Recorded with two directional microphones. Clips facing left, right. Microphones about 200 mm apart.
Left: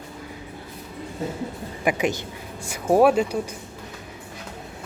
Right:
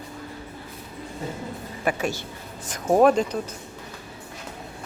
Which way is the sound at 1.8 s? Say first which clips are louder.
Left 3 dB; 15° left (ahead or behind).